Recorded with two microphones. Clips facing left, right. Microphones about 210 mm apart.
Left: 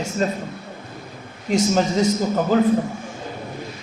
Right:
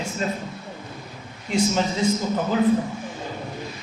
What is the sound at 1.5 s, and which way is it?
Speech, 40° left (ahead or behind).